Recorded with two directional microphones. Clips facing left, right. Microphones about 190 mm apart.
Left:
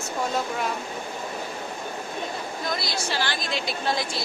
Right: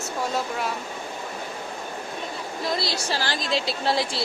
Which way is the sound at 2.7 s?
35° right (ahead or behind).